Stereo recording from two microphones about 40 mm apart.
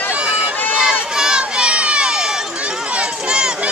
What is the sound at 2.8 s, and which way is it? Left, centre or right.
Run, right.